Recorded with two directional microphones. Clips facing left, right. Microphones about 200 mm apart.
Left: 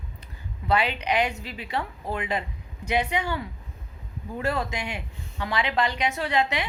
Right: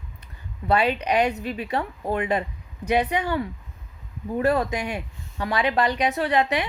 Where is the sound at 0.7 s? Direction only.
40° right (ahead or behind).